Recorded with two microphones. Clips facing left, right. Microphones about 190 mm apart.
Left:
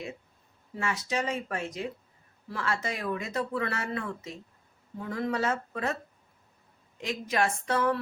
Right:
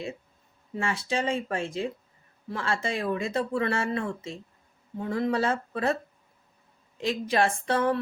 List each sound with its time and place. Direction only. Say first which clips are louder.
0.8 s speech: right 2 dB; 30° right (ahead or behind)
7.0 s speech: right 4 dB; 30° right (ahead or behind)